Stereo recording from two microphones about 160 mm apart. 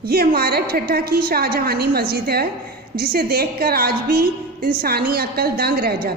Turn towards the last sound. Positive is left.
turn(degrees=-75)  # may be behind; listen again after turning